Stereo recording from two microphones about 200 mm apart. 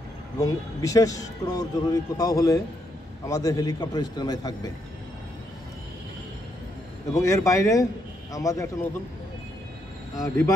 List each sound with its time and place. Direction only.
0.4 s speech: 20° left (ahead or behind)
7.2 s speech: 15° left (ahead or behind)
10.1 s speech: 15° left (ahead or behind)